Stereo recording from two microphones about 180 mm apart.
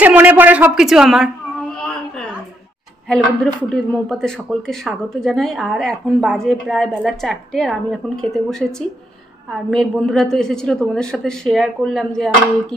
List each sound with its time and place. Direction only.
0.0 s a woman's voice: 10° right (ahead or behind)
3.5 s speech: 5° left (ahead or behind)